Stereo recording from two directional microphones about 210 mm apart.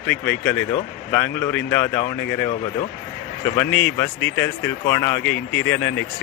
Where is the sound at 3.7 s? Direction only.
60° left (ahead or behind).